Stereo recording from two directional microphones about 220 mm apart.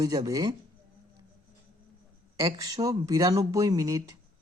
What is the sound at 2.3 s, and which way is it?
Speech, 15° right (ahead or behind).